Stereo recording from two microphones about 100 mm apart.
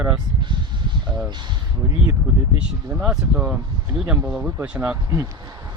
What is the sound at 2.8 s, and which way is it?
Speech, 10° right (ahead or behind).